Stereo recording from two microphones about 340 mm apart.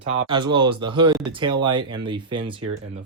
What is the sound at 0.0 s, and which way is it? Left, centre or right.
Speech, centre.